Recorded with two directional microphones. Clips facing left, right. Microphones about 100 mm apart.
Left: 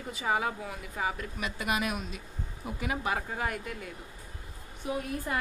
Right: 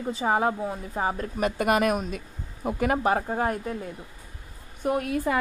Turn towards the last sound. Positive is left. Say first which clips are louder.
# right 8 dB
turn(degrees=-60)  # may be behind; listen again after turning